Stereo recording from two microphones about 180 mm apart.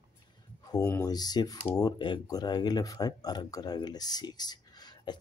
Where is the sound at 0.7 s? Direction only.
20° left (ahead or behind).